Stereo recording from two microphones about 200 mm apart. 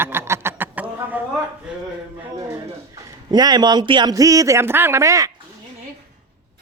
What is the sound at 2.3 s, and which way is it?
A man's voice, 15° right (ahead or behind).